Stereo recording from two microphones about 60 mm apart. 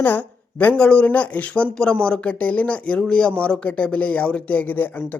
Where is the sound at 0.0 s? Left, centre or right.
Left.